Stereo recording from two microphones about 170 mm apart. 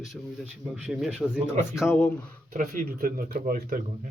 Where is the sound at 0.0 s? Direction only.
5° right (ahead or behind).